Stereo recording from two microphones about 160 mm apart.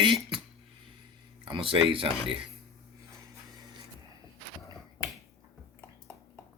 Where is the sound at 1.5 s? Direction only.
35° right (ahead or behind).